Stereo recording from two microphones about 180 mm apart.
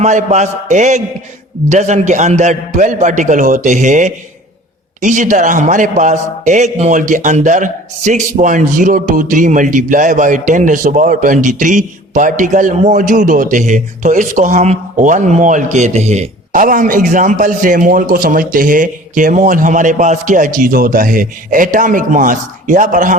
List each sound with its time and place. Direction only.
0.0 s a man's voice: 40° right (ahead or behind)